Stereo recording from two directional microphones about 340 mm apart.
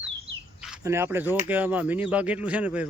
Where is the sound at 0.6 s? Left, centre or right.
Centre.